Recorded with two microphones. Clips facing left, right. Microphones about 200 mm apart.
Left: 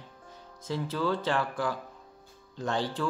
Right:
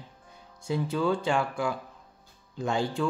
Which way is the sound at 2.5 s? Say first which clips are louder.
Right 2 dB; 10° right (ahead or behind).